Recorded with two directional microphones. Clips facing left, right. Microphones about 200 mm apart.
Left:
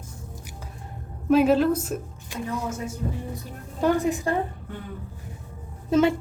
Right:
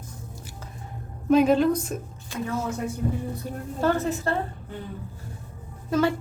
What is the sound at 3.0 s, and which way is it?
Music, 35° right (ahead or behind).